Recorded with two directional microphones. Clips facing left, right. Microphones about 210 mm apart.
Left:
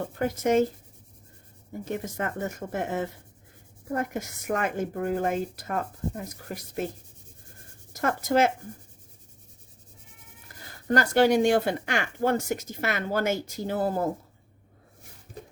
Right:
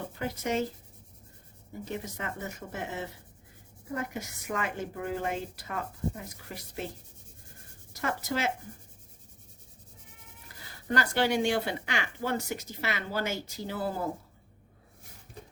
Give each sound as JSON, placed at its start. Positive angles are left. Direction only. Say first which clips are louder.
{"t": 0.2, "sound": "speech", "louder": "left 8 dB", "side_deg": 50}
{"t": 1.8, "sound": "speech", "louder": "left 6 dB", "side_deg": 50}
{"t": 8.0, "sound": "speech", "louder": "left 8 dB", "side_deg": 50}
{"t": 10.5, "sound": "bleat", "louder": "left 4 dB", "side_deg": 45}
{"t": 10.8, "sound": "speech", "louder": "left 7 dB", "side_deg": 45}